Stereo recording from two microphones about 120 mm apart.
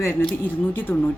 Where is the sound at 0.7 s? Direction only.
15° left (ahead or behind).